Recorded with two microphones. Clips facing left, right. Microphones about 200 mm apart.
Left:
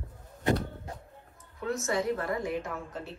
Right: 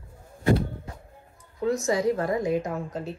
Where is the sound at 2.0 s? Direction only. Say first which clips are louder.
Right 6 dB; 40° right (ahead or behind).